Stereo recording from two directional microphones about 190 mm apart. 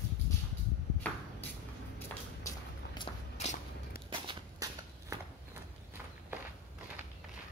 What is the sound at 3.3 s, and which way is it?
Walk, 35° left (ahead or behind).